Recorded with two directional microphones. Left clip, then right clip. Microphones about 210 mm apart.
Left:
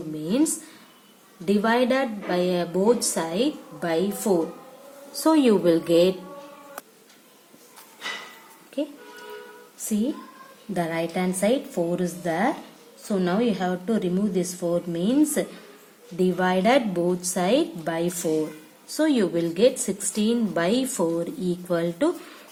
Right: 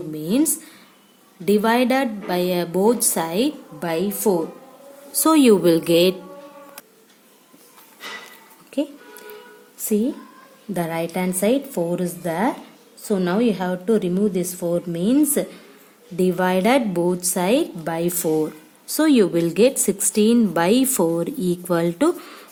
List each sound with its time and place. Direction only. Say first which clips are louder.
0.3 s a woman's voice: right 3 dB; 45° right (ahead or behind)
8.8 s a woman's voice: right 4 dB; 50° right (ahead or behind)